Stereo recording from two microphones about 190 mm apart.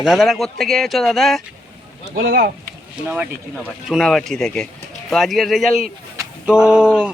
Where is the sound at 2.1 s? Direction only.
55° right (ahead or behind).